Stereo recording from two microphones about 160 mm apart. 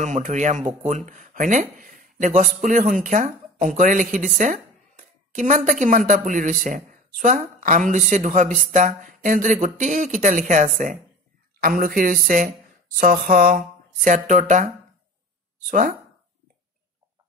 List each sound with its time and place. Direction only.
0.0 s speech: 50° right (ahead or behind)
15.7 s speech: 60° right (ahead or behind)